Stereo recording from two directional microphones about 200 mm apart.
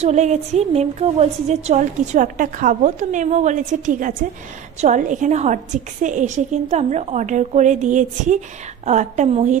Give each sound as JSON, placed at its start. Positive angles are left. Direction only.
{"t": 0.0, "sound": "a woman's voice", "side_deg": -35}